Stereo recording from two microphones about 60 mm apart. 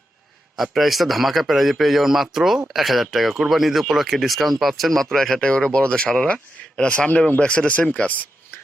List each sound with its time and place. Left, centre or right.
0.5 s a man's voice: centre; by 8.3 s left